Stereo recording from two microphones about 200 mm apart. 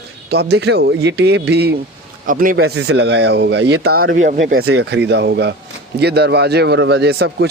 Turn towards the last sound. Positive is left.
turn(degrees=-55)  # may be behind; listen again after turning